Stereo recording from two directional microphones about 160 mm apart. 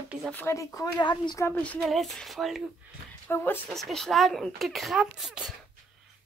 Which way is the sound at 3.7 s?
Centre (ahead or behind).